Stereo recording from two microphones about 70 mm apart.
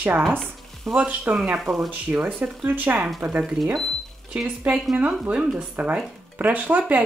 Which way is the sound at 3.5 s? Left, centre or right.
Centre.